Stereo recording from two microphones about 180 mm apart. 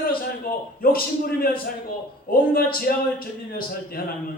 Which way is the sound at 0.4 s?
55° left (ahead or behind).